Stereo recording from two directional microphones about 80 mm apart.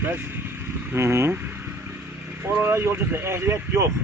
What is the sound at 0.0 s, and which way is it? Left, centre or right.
Speech, right.